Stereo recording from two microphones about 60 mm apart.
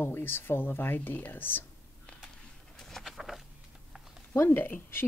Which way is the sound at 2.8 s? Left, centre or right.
Centre.